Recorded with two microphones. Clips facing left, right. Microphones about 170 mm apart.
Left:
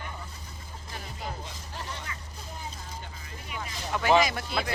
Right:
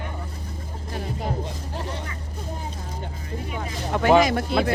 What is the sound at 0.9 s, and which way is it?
Speech, 55° right (ahead or behind).